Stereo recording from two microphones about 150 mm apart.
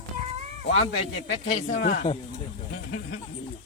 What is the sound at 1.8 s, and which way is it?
Speech, 90° left.